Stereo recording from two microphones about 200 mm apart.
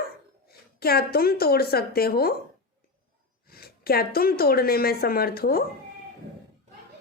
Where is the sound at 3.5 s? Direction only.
50° left (ahead or behind).